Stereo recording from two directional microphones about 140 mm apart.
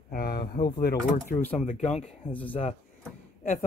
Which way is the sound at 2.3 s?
10° left (ahead or behind).